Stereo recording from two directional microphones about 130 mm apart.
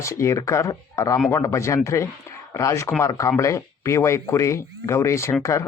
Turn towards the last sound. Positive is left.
turn(degrees=20)  # may be behind; listen again after turning